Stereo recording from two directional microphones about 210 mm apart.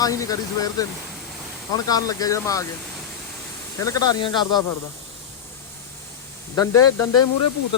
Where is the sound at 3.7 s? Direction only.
15° left (ahead or behind).